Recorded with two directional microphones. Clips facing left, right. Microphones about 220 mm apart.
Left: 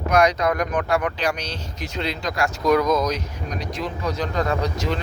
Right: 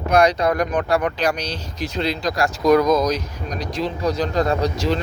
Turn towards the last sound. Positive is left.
turn(degrees=-35)  # may be behind; listen again after turning